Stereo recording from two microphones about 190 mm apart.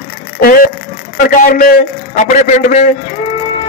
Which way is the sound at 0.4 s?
50° left (ahead or behind).